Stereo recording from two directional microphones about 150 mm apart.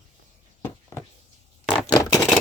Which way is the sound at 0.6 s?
20° left (ahead or behind).